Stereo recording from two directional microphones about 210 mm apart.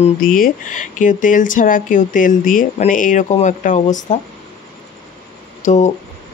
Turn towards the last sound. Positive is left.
turn(degrees=35)  # may be behind; listen again after turning